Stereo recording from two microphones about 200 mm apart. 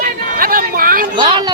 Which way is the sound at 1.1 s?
25° right (ahead or behind).